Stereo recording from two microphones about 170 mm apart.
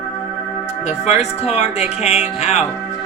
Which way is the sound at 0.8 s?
40° left (ahead or behind).